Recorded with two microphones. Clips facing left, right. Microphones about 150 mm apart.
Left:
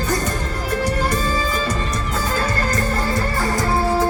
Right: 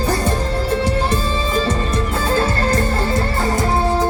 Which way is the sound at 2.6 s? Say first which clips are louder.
Right 3 dB; 30° right (ahead or behind).